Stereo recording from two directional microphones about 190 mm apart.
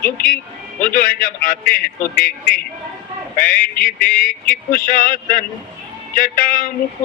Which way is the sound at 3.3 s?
45° left (ahead or behind).